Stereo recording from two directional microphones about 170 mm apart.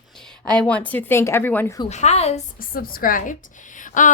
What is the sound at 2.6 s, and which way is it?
Speech, 60° left (ahead or behind).